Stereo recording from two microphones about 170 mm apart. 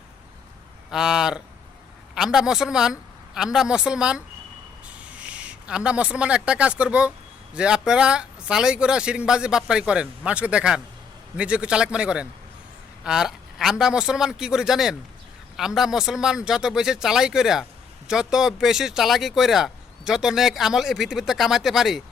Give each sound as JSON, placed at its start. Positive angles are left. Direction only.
{"t": 0.9, "sound": "speech", "side_deg": -5}
{"t": 5.2, "sound": "a man's voice", "side_deg": -5}